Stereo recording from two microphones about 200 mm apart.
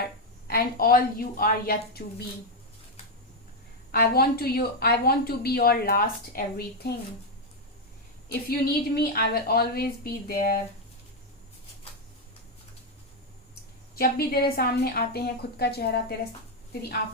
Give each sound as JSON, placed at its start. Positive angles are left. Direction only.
{"t": 0.4, "sound": "a woman's voice", "side_deg": 50}
{"t": 3.9, "sound": "a woman's voice", "side_deg": 50}
{"t": 8.3, "sound": "a woman's voice", "side_deg": 50}
{"t": 13.9, "sound": "a woman's voice", "side_deg": 50}